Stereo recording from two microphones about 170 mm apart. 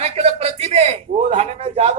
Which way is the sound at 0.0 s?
40° right (ahead or behind).